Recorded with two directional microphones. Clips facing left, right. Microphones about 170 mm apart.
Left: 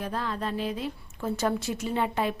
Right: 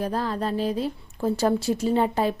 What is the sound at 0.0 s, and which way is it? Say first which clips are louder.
Speech: right 5 dB; 35° right (ahead or behind).